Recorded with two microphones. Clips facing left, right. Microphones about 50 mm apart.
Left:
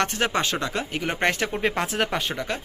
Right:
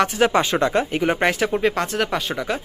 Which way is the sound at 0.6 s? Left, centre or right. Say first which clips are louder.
Right 8 dB; right.